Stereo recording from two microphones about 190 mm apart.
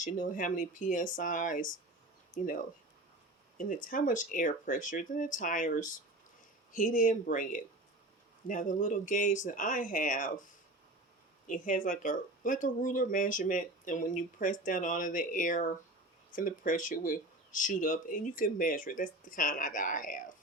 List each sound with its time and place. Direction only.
0.0 s speech: 45° left (ahead or behind)
3.6 s speech: 45° left (ahead or behind)
11.4 s speech: 45° left (ahead or behind)